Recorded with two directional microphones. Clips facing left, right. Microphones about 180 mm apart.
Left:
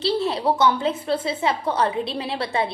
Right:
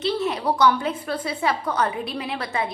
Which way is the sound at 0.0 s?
30° left (ahead or behind).